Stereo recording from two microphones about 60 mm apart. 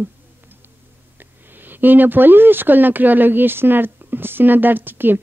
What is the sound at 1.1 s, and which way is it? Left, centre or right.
Speech, right.